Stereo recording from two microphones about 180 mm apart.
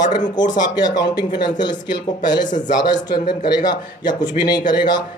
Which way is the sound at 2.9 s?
25° left (ahead or behind).